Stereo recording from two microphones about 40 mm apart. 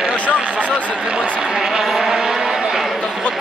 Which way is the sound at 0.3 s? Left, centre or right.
Right.